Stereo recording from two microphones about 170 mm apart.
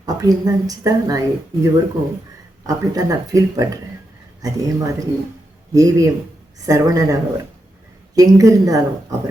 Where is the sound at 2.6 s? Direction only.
20° right (ahead or behind).